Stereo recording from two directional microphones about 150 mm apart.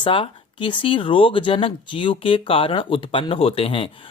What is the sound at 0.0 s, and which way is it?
Speech, 35° left (ahead or behind).